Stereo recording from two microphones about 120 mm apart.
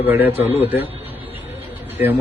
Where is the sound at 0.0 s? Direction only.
20° right (ahead or behind).